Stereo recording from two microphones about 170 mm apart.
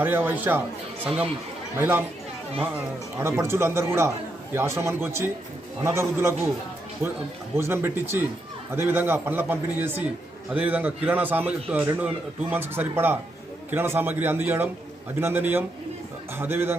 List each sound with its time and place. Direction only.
0.0 s speech: 10° right (ahead or behind)
7.5 s speech: 15° right (ahead or behind)